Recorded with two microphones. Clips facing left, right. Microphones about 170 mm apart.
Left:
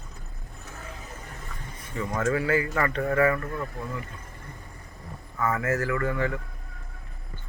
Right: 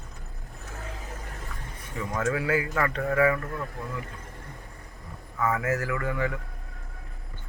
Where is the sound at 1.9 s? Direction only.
5° right (ahead or behind).